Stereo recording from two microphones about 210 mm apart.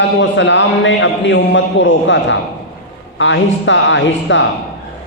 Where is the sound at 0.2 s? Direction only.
60° left (ahead or behind).